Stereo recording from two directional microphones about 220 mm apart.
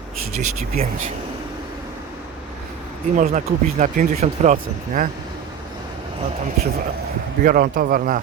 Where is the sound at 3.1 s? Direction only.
35° right (ahead or behind).